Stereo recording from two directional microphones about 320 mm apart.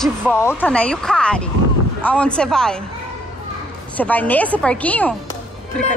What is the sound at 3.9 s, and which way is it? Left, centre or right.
Speech, centre.